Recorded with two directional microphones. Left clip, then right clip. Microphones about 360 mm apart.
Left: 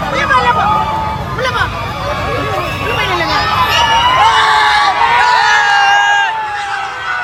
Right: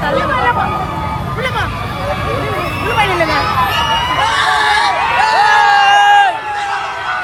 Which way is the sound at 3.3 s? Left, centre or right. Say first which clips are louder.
Left 2 dB; centre.